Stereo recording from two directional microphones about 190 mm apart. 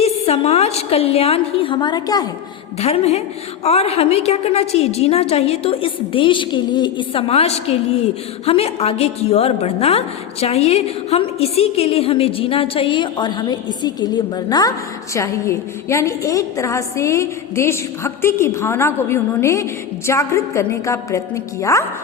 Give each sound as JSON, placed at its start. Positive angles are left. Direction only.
{"t": 0.0, "sound": "a woman's voice", "side_deg": 35}
{"t": 2.7, "sound": "a woman's voice", "side_deg": 35}